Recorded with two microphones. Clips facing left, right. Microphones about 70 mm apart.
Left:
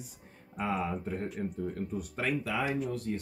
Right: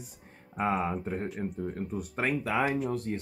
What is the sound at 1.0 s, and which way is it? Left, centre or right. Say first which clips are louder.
Speech: right 2 dB; right.